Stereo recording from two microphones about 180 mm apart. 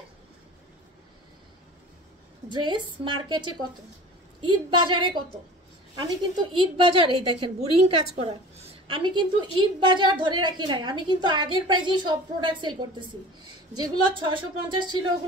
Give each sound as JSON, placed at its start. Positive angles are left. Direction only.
{"t": 2.5, "sound": "a woman's voice", "side_deg": -25}